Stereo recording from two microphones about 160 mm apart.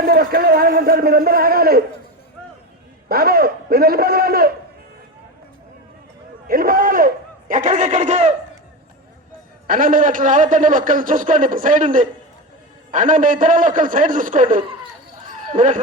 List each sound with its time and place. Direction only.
0.0 s a man's voice: 70° right (ahead or behind)
3.1 s a man's voice: 70° right (ahead or behind)
6.5 s speech: 60° right (ahead or behind)
9.6 s a man's voice: 60° right (ahead or behind)
15.3 s a sound: 50° right (ahead or behind)